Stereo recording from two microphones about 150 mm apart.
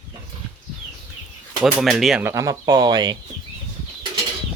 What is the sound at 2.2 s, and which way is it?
Speech, 20° right (ahead or behind).